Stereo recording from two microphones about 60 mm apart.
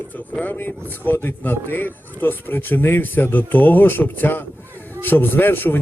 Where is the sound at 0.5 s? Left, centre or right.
Left.